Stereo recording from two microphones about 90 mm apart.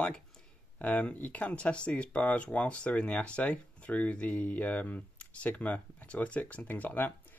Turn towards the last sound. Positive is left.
turn(degrees=20)  # may be behind; listen again after turning